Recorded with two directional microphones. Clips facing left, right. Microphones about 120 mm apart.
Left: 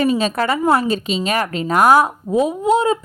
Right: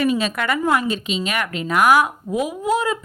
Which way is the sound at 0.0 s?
35° left (ahead or behind).